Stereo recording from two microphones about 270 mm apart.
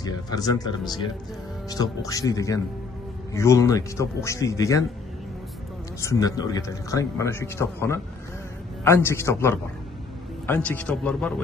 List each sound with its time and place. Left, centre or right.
0.0 s a man's voice: centre
1.7 s a man's voice: centre
5.9 s a man's voice: centre